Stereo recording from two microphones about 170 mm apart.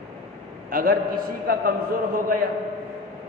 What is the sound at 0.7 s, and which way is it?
Speech, 55° right (ahead or behind).